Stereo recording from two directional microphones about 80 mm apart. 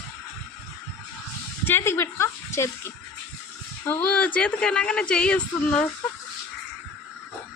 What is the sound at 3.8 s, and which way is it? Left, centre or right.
Speech, left.